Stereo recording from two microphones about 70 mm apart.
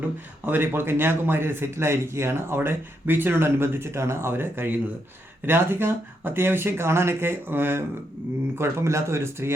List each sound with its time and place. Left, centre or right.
0.4 s a man's voice: right